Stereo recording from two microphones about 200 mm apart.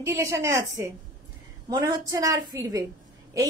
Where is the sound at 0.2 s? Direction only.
15° right (ahead or behind).